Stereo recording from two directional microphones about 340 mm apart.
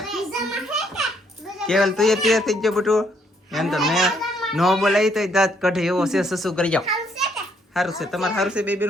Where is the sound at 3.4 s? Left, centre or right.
Centre.